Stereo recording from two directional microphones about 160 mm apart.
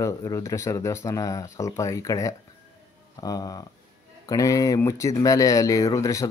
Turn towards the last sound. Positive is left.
turn(degrees=20)  # may be behind; listen again after turning